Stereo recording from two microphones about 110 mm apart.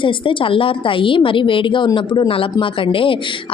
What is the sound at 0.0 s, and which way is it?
Speech, 50° left (ahead or behind).